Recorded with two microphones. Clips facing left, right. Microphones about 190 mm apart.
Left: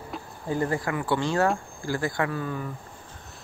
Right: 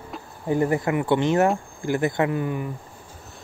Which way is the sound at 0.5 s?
20° right (ahead or behind).